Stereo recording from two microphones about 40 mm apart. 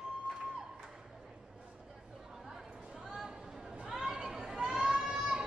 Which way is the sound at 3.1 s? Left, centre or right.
Centre.